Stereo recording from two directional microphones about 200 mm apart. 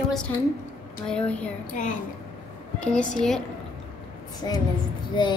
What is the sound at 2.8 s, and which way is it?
Speech, 5° left (ahead or behind).